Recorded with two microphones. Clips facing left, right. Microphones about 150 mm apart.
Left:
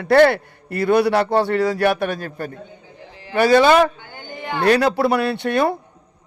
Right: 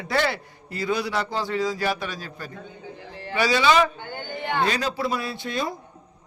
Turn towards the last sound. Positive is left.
turn(degrees=65)  # may be behind; listen again after turning